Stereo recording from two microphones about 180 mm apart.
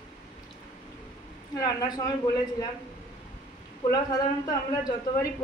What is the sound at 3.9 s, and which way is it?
A man's voice, 20° left (ahead or behind).